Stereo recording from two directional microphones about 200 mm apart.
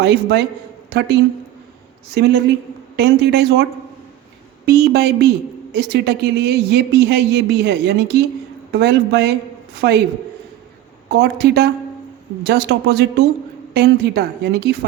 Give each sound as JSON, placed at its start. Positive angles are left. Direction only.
{"t": 0.0, "sound": "a woman's voice", "side_deg": -55}
{"t": 2.9, "sound": "speech", "side_deg": -55}
{"t": 11.1, "sound": "speech", "side_deg": -55}